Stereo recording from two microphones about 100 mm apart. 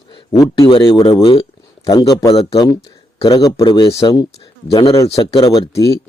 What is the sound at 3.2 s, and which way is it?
Speech, 45° left (ahead or behind).